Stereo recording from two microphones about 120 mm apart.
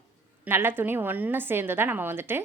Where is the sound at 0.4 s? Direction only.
20° right (ahead or behind).